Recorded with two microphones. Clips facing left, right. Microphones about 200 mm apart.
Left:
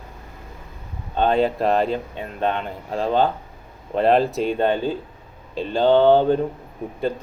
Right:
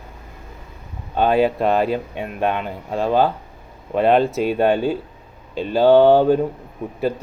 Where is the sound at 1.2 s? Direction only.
5° right (ahead or behind).